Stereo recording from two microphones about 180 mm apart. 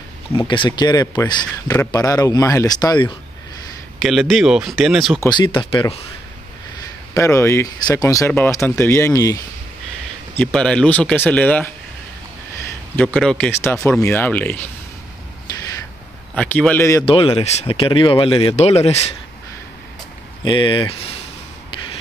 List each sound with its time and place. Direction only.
0.3 s a man's voice: 30° left (ahead or behind)
4.0 s speech: centre (ahead or behind)
5.3 s a man's voice: 25° left (ahead or behind)
7.2 s speech: 15° left (ahead or behind)
10.3 s speech: 5° left (ahead or behind)
12.9 s speech: 5° left (ahead or behind)
16.3 s speech: 10° left (ahead or behind)
17.0 s speech: 30° left (ahead or behind)
20.4 s a man's voice: 25° left (ahead or behind)